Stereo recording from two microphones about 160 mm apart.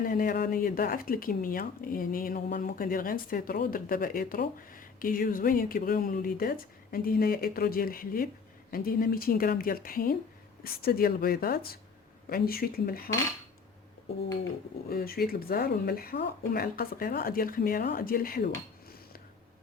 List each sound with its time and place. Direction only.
0.0 s speech: 60° left (ahead or behind)
14.8 s speech: 70° left (ahead or behind)